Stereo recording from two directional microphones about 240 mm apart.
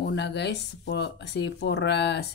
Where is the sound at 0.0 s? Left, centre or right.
Left.